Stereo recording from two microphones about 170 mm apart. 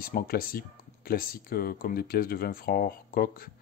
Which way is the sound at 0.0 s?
60° left (ahead or behind).